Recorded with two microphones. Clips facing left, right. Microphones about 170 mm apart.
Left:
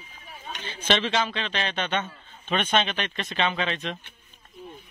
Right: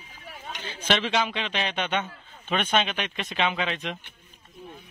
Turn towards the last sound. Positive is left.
turn(degrees=-10)  # may be behind; listen again after turning